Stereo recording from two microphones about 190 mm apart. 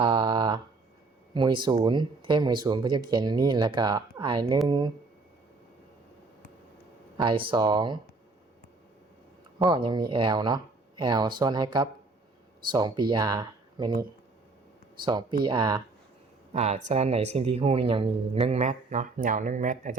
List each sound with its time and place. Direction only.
0.0 s a sound: 25° right (ahead or behind)
1.3 s speech: 25° right (ahead or behind)
7.2 s speech: 25° right (ahead or behind)
9.6 s speech: 25° right (ahead or behind)
15.0 s speech: 25° right (ahead or behind)
16.5 s speech: 35° right (ahead or behind)